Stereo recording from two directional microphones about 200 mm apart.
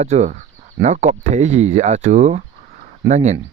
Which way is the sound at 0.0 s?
35° right (ahead or behind).